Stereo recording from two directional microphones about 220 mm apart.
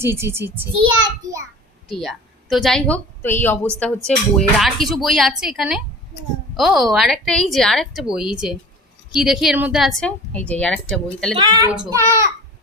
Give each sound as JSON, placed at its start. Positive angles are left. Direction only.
{"t": 0.0, "sound": "a child's voice", "side_deg": -10}
{"t": 1.9, "sound": "a woman's voice", "side_deg": 0}
{"t": 11.3, "sound": "a woman's voice", "side_deg": -20}